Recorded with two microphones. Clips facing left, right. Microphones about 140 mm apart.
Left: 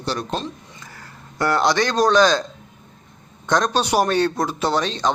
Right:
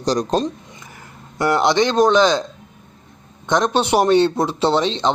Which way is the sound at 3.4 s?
20° right (ahead or behind).